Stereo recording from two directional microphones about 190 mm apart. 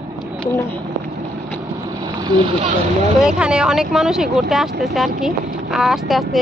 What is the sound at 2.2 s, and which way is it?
Vehicle, 25° right (ahead or behind).